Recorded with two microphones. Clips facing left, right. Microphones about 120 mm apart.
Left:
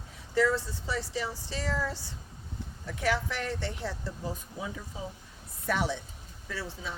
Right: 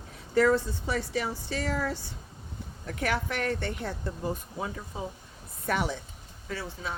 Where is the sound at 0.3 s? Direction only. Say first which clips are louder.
Right 4 dB; 55° right (ahead or behind).